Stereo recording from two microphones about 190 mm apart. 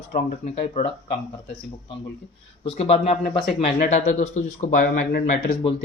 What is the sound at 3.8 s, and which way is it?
Speech, 45° left (ahead or behind).